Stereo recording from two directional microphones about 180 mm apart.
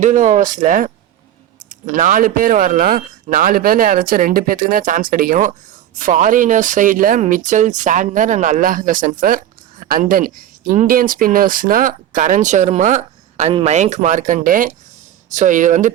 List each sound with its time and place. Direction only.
0.0 s speech: 45° right (ahead or behind)